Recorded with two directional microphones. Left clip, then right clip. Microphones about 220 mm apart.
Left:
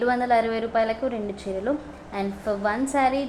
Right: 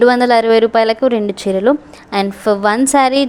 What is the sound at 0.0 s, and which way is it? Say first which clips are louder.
A woman's voice: right 11 dB; 45° right (ahead or behind).